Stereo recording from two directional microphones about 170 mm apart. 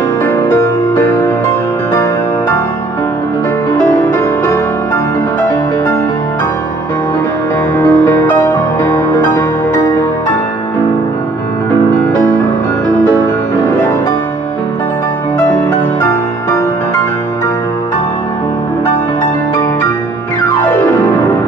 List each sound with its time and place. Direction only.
0.2 s music: 15° left (ahead or behind)
7.7 s music: 15° left (ahead or behind)